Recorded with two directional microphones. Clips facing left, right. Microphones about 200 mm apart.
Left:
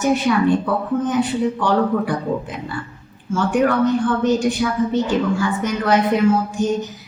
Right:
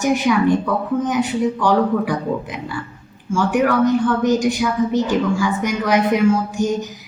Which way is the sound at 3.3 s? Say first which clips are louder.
Even; 10° right (ahead or behind).